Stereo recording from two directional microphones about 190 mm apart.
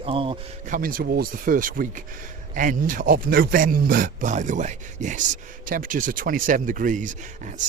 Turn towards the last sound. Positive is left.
turn(degrees=-40)  # may be behind; listen again after turning